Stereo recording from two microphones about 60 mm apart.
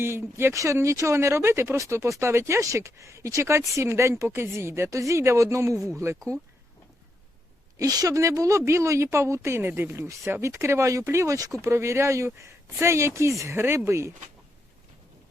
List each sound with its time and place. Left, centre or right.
0.0 s speech: right
0.5 s speech: right
7.8 s speech: right
9.6 s speech: right
11.3 s speech: right
11.6 s speech: right